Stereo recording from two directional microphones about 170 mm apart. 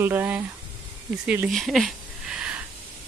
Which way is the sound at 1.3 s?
5° right (ahead or behind).